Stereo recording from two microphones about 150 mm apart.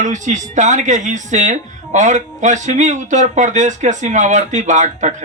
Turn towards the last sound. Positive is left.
turn(degrees=-55)  # may be behind; listen again after turning